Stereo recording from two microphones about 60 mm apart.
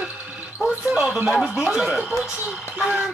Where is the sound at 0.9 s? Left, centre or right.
Centre.